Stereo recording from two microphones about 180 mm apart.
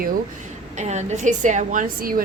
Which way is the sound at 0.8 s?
40° right (ahead or behind).